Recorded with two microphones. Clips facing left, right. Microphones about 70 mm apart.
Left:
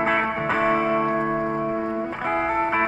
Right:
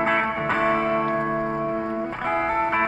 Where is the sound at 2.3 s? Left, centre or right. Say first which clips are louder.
Even; centre.